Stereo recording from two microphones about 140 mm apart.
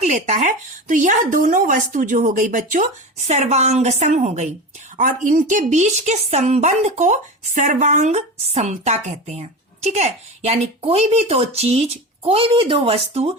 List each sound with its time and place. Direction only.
0.0 s speech: 60° right (ahead or behind)
4.9 s a woman's voice: 70° right (ahead or behind); by 13.3 s 45° right (ahead or behind)